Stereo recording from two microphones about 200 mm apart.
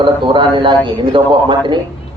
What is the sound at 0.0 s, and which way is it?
A man's voice, 25° right (ahead or behind).